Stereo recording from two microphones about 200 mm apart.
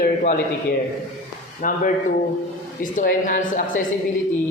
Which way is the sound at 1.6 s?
40° left (ahead or behind).